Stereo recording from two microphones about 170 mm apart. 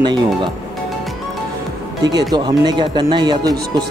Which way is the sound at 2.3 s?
25° right (ahead or behind).